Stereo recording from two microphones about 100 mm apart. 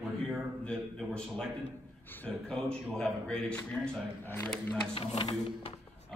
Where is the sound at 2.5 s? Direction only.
10° left (ahead or behind).